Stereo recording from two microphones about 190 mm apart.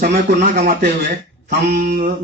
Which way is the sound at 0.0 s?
50° right (ahead or behind).